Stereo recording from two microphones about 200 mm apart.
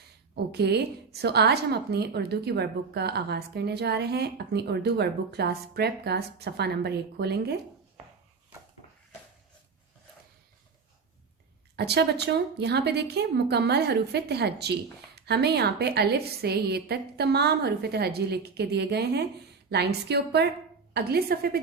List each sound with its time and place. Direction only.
0.3 s a woman's voice: 55° right (ahead or behind)
11.8 s a woman's voice: 55° right (ahead or behind)